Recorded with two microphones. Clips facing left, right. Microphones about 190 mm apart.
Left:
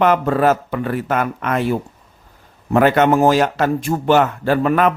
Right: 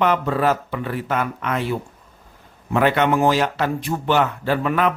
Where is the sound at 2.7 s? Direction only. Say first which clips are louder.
Left 4 dB; 45° left (ahead or behind).